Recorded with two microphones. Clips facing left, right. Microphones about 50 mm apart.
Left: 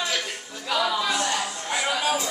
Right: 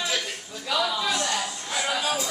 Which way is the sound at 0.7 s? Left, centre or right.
Centre.